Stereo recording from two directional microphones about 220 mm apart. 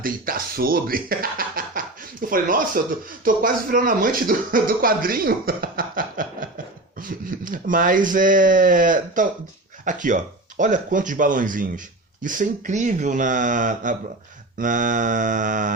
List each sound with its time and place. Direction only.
0.0 s speech: 40° right (ahead or behind)